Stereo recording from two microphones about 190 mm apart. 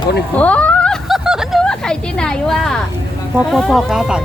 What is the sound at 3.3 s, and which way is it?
Speech, centre (ahead or behind).